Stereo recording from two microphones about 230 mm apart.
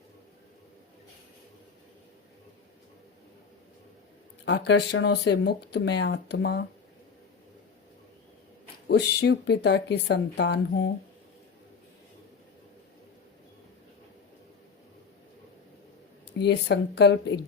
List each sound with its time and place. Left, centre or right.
4.4 s speech: left
8.9 s speech: left
16.4 s speech: left